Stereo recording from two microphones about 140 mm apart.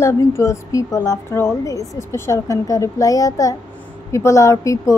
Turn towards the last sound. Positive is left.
turn(degrees=20)  # may be behind; listen again after turning